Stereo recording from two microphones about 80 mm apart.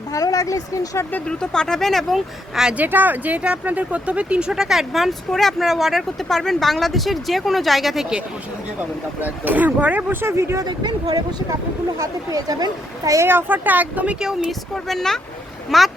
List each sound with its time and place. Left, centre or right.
0.1 s speech: left
1.3 s speech: centre
2.7 s speech: right; by 8.0 s centre
8.8 s speech: right
10.6 s speech: right
13.2 s speech: right
14.8 s speech: centre